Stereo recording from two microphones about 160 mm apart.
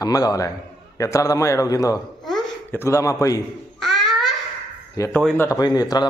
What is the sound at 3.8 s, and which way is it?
Babbling, centre (ahead or behind).